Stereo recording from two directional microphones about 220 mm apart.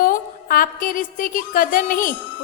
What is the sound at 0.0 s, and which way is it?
A woman's voice, 40° left (ahead or behind).